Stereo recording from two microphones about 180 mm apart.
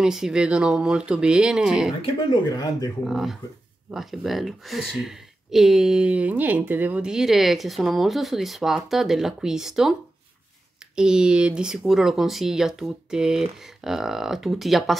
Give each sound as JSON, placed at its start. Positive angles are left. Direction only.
{"t": 0.0, "sound": "speech", "side_deg": -5}
{"t": 2.5, "sound": "speech", "side_deg": 20}
{"t": 3.0, "sound": "speech", "side_deg": 0}
{"t": 11.0, "sound": "speech", "side_deg": -5}